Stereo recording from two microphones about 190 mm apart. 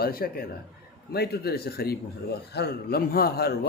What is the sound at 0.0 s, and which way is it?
A man's voice, 50° left (ahead or behind).